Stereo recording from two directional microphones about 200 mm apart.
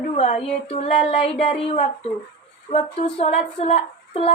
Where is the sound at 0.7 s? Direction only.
30° left (ahead or behind).